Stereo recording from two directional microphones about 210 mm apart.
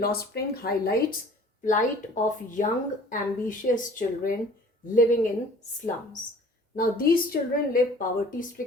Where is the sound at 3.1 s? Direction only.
40° left (ahead or behind).